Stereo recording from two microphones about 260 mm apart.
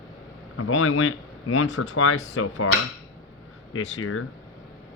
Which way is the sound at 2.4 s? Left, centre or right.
Left.